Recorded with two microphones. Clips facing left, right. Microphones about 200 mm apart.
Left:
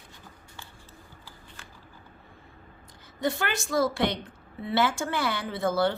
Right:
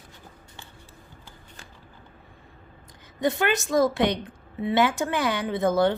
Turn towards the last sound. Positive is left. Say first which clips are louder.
# right 4 dB
turn(degrees=-20)  # may be behind; listen again after turning